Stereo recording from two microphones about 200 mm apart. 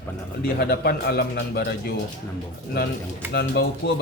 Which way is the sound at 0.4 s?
50° left (ahead or behind).